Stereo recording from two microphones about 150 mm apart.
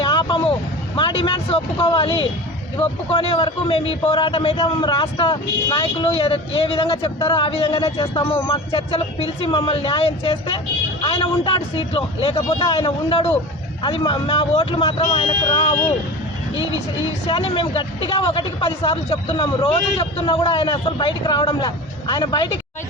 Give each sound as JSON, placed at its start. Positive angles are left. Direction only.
{"t": 0.0, "sound": "vehicle", "side_deg": 35}
{"t": 0.9, "sound": "speech", "side_deg": 35}
{"t": 12.5, "sound": "speech", "side_deg": 25}
{"t": 12.7, "sound": "speech", "side_deg": 40}
{"t": 14.3, "sound": "speech", "side_deg": 45}
{"t": 16.6, "sound": "speech", "side_deg": -25}
{"t": 17.5, "sound": "speech", "side_deg": 35}
{"t": 19.4, "sound": "speech", "side_deg": 30}
{"t": 19.7, "sound": "speech", "side_deg": 40}